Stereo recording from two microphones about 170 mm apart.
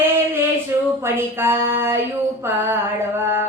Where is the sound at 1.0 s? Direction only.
15° right (ahead or behind).